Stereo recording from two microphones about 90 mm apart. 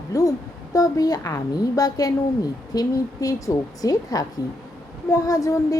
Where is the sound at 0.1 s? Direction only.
40° left (ahead or behind).